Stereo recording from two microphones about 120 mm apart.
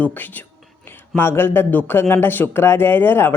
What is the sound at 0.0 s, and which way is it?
A woman's voice, 15° left (ahead or behind).